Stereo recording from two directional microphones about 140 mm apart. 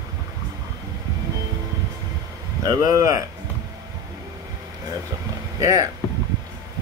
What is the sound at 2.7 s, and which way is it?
Speech, 25° right (ahead or behind).